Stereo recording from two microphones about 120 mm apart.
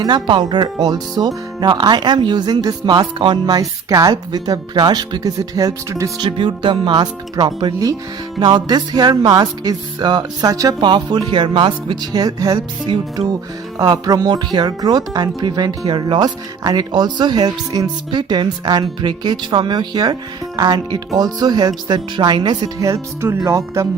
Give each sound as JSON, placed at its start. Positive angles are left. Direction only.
{"t": 0.0, "sound": "speech", "side_deg": -40}
{"t": 6.2, "sound": "speech", "side_deg": -45}
{"t": 13.7, "sound": "speech", "side_deg": -35}